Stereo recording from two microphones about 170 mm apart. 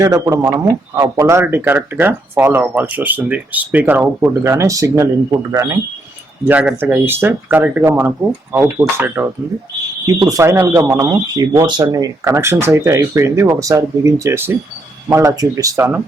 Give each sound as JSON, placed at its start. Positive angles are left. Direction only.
{"t": 0.0, "sound": "speech", "side_deg": -20}